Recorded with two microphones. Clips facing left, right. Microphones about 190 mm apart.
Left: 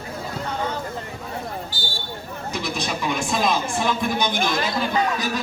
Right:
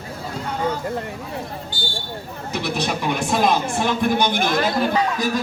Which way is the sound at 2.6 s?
65° right (ahead or behind).